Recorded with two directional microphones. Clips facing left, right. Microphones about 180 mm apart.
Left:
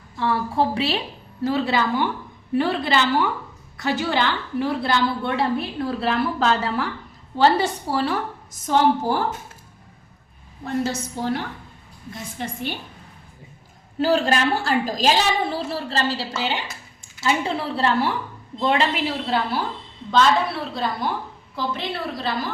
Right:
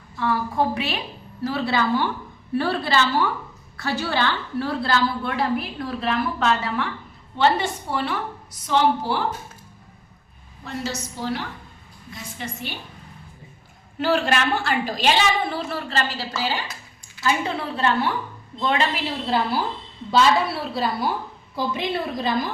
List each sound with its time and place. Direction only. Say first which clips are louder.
0.2 s a woman's voice: left 1 dB; 30° left (ahead or behind)
1.5 s a woman's voice: left 1 dB; 15° left (ahead or behind); by 9.2 s 45° left (ahead or behind)
10.6 s a woman's voice: left 5 dB; 55° left (ahead or behind)
14.0 s a woman's voice: left 2 dB; 35° left (ahead or behind)
17.7 s a woman's voice: even; 30° left (ahead or behind)
19.2 s a woman's voice: right 1 dB; centre (ahead or behind)